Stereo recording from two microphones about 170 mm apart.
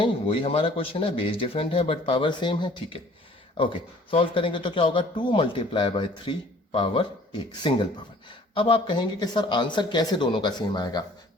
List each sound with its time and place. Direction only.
0.0 s speech: 30° left (ahead or behind)